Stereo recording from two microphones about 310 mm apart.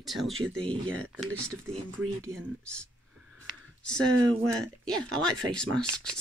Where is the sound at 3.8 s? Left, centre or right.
Centre.